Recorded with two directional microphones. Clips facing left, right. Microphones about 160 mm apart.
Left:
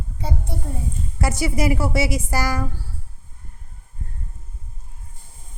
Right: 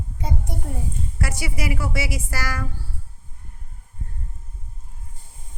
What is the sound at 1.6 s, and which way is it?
Speech, 35° left (ahead or behind).